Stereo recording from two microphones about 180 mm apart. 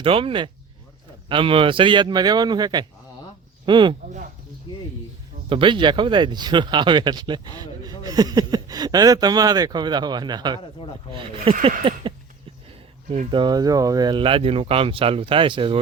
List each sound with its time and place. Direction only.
0.0 s speech: 30° right (ahead or behind)
5.5 s speech: 30° right (ahead or behind)
13.3 s speech: 25° right (ahead or behind)